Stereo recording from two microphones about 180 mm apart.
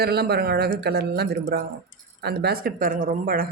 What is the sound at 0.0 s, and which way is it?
Speech, 60° right (ahead or behind).